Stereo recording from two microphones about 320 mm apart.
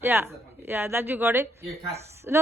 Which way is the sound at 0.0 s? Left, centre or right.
Centre.